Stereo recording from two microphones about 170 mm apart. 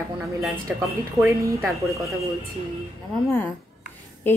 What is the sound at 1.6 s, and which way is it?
Speech, centre (ahead or behind).